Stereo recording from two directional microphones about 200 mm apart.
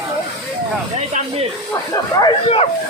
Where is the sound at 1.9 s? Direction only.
20° left (ahead or behind).